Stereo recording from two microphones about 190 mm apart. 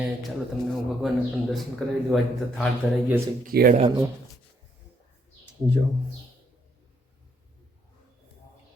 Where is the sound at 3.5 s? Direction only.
55° right (ahead or behind).